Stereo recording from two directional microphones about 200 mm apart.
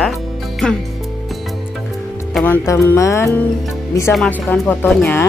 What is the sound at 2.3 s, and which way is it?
Speech, 10° left (ahead or behind).